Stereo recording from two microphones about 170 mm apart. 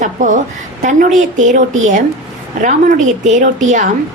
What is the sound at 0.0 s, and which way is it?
A woman's voice, 50° right (ahead or behind).